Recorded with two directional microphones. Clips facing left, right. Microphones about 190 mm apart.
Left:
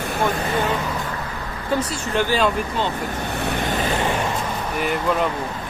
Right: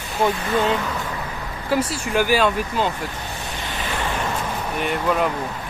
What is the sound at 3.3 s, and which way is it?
Vehicle, 60° left (ahead or behind).